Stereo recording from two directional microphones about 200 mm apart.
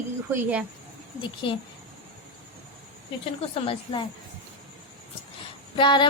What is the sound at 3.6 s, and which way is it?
Speech, 25° left (ahead or behind).